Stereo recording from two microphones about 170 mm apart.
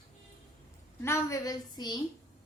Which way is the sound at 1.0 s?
15° left (ahead or behind).